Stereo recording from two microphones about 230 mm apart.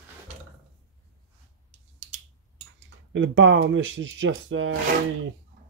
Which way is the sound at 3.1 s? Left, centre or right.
Right.